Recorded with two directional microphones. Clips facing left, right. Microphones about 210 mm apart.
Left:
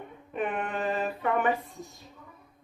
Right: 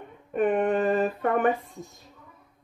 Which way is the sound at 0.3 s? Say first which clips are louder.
Right 9 dB; 50° right (ahead or behind).